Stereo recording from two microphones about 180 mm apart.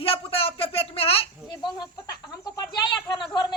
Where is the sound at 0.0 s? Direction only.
30° left (ahead or behind).